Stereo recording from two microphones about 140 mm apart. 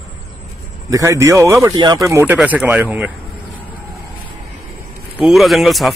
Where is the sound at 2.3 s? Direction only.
10° right (ahead or behind).